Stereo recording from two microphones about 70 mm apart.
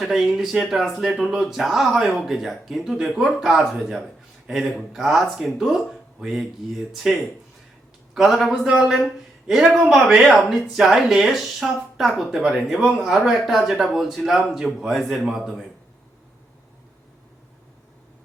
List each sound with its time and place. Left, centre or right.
0.0 s speech: centre